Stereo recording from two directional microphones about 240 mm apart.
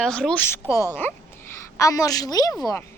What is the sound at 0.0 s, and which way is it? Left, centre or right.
A woman's voice, centre.